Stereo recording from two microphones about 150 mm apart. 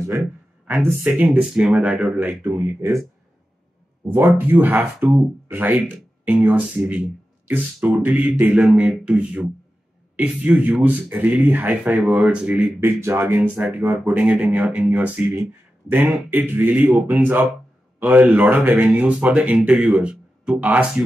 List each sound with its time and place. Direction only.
0.7 s speech: 5° right (ahead or behind)
4.4 s speech: 10° right (ahead or behind)
13.6 s speech: 5° right (ahead or behind)